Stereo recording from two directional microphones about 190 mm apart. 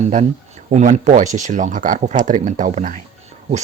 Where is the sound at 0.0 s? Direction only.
40° right (ahead or behind).